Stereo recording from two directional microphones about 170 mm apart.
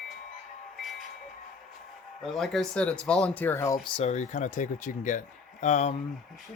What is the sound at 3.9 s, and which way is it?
Speech, 40° left (ahead or behind).